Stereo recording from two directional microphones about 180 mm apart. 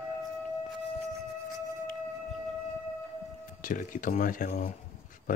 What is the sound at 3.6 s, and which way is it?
A man's voice, 45° left (ahead or behind).